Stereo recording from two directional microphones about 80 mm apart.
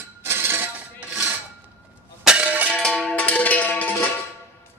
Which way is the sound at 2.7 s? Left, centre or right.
Centre.